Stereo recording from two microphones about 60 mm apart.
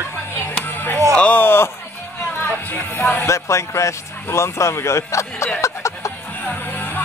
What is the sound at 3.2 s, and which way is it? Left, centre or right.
Speech, left.